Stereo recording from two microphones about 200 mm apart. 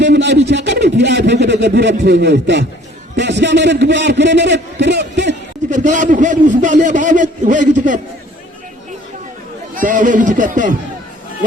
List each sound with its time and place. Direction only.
0.0 s a sound: 60° right (ahead or behind)
3.2 s a man's voice: 60° right (ahead or behind)
5.7 s a man's voice: 40° right (ahead or behind)
9.7 s a man's voice: 40° right (ahead or behind)